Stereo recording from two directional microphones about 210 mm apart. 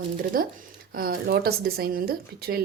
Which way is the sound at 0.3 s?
45° right (ahead or behind).